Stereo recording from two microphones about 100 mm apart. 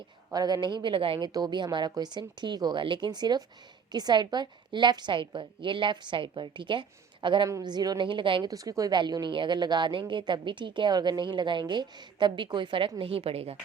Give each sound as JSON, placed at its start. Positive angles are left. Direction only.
{"t": 0.3, "sound": "a woman's voice", "side_deg": -45}
{"t": 1.3, "sound": "a woman's voice", "side_deg": -45}
{"t": 7.4, "sound": "a woman's voice", "side_deg": -40}
{"t": 8.4, "sound": "a woman's voice", "side_deg": -35}
{"t": 9.0, "sound": "a woman's voice", "side_deg": -45}
{"t": 13.0, "sound": "a woman's voice", "side_deg": -70}